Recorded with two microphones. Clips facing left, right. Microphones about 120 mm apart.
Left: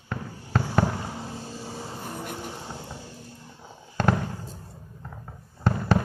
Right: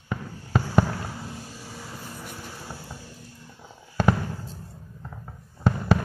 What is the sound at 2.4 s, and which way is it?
Vehicle, 25° left (ahead or behind).